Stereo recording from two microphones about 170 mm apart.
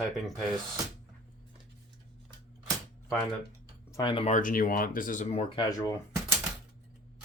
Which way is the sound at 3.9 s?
25° left (ahead or behind).